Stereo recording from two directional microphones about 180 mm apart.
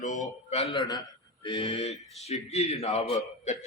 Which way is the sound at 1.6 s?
35° left (ahead or behind).